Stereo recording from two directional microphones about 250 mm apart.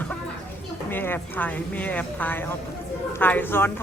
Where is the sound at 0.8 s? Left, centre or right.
Centre.